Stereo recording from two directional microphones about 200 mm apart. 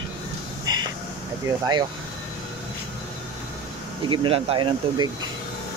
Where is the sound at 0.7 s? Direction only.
20° right (ahead or behind).